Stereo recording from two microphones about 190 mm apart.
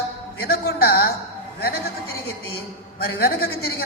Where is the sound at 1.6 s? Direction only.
55° left (ahead or behind).